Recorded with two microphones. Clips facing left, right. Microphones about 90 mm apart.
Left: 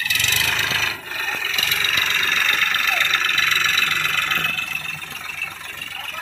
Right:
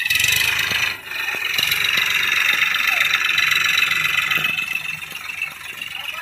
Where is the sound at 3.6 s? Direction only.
10° left (ahead or behind).